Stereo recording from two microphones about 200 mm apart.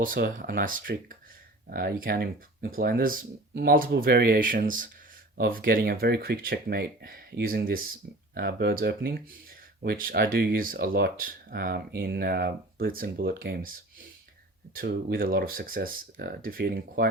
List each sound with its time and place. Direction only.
0.0 s speech: 45° right (ahead or behind)